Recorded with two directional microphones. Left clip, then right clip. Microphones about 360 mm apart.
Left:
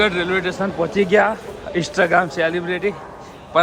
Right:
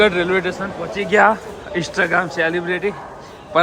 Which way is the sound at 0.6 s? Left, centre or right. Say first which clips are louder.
Left 5 dB; centre.